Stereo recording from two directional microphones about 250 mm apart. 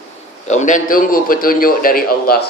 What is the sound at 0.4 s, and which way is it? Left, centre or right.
A man's voice, left.